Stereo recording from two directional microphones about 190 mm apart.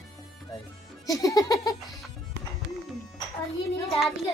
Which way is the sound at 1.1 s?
20° left (ahead or behind).